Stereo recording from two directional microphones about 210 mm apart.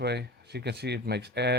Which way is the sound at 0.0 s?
50° right (ahead or behind).